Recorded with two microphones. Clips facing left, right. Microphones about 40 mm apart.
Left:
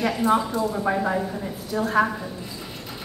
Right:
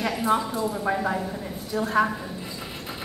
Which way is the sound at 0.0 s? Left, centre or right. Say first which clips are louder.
Left 3 dB; centre.